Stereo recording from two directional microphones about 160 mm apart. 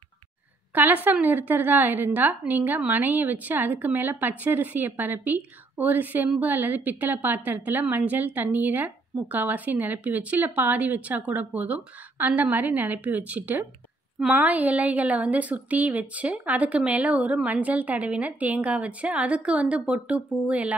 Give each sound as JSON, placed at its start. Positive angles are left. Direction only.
{"t": 0.7, "sound": "a woman's voice", "side_deg": -10}